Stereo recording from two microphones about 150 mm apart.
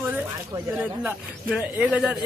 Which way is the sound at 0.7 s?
5° right (ahead or behind).